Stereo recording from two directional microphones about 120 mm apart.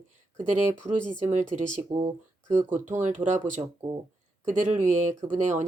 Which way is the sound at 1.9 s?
40° right (ahead or behind).